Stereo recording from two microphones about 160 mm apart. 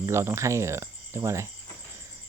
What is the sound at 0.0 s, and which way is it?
Speech, 15° right (ahead or behind).